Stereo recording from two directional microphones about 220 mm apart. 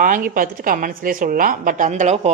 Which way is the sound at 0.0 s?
40° right (ahead or behind).